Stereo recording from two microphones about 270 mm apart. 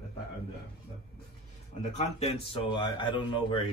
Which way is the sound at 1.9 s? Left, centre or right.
Left.